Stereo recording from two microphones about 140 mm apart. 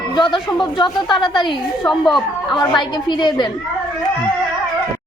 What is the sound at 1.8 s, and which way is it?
Speech, centre (ahead or behind).